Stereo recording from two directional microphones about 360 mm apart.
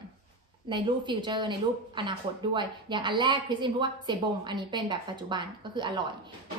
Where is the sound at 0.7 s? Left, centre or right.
Centre.